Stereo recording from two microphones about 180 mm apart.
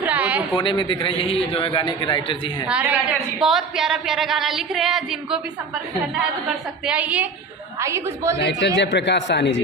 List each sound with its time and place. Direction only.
0.0 s a sound: 10° right (ahead or behind)
0.5 s a man's voice: 25° left (ahead or behind)
2.6 s a woman's voice: 10° right (ahead or behind)
6.5 s a woman's voice: 5° right (ahead or behind)
8.4 s a man's voice: 70° left (ahead or behind)